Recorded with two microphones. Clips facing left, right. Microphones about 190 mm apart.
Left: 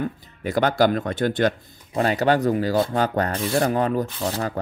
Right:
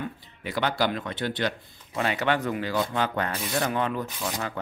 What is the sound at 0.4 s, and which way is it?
Speech, 45° left (ahead or behind).